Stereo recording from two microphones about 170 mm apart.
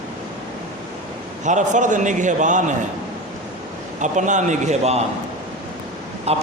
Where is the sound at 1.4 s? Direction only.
45° right (ahead or behind).